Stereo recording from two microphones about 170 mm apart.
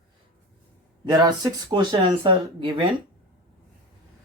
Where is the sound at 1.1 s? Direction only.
20° right (ahead or behind).